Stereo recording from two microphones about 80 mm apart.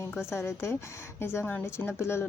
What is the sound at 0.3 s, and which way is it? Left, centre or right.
Speech, left.